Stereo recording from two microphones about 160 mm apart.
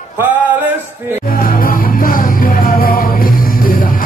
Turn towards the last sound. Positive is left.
turn(degrees=60)  # may be behind; listen again after turning